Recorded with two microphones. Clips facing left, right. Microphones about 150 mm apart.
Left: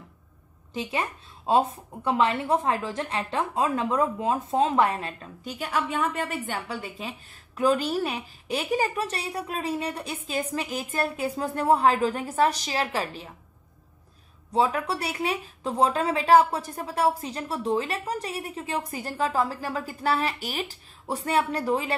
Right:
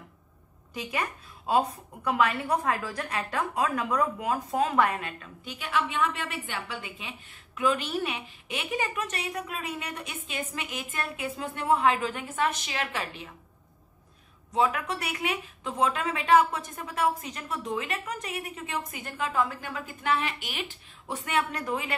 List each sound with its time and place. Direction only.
0.7 s a woman's voice: 25° left (ahead or behind)
14.5 s a woman's voice: 35° left (ahead or behind)